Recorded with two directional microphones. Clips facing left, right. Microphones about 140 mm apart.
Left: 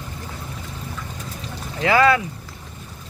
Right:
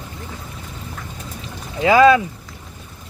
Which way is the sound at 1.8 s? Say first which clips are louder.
Right 5 dB; 15° right (ahead or behind).